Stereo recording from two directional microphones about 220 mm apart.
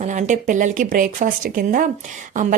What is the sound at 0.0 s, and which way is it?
Speech, 35° right (ahead or behind).